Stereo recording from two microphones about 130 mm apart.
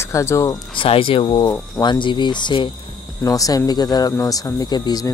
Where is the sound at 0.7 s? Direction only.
45° left (ahead or behind).